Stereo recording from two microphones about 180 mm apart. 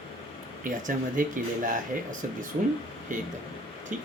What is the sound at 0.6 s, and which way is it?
Speech, 45° right (ahead or behind).